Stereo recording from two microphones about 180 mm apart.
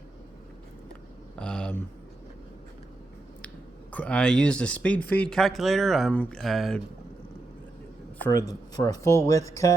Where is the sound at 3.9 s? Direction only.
5° left (ahead or behind).